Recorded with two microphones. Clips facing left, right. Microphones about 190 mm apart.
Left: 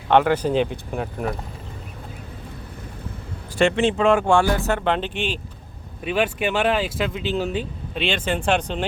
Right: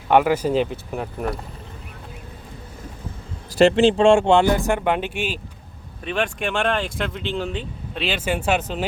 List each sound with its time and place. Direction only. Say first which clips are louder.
0.1 s speech: even; 10° right (ahead or behind)
3.6 s speech: right 4 dB; 35° right (ahead or behind); by 5.4 s 10° right (ahead or behind)
6.1 s speech: left 2 dB; 5° left (ahead or behind)